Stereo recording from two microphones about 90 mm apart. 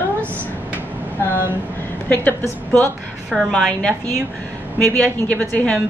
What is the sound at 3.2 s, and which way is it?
Speech, 5° left (ahead or behind).